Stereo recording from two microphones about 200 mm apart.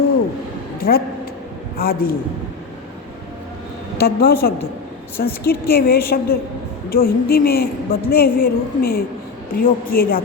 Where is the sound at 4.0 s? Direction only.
50° left (ahead or behind).